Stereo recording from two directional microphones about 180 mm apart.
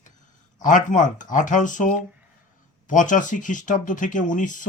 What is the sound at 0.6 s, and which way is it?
Speech, 45° left (ahead or behind).